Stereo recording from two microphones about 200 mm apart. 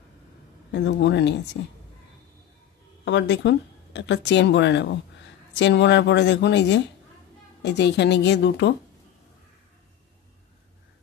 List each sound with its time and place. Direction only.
0.7 s speech: 60° left (ahead or behind)
3.1 s speech: 60° left (ahead or behind)